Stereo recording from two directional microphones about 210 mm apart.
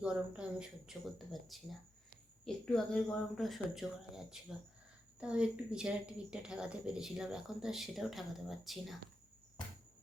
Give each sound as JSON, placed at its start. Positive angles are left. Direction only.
{"t": 0.0, "sound": "speech", "side_deg": -5}